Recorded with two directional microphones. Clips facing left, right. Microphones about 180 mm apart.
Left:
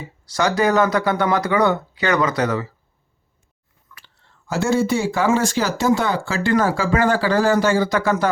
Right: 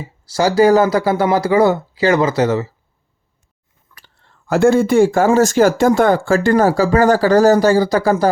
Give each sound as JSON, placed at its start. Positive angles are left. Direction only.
{"t": 0.3, "sound": "speech", "side_deg": -30}
{"t": 3.9, "sound": "speech", "side_deg": -50}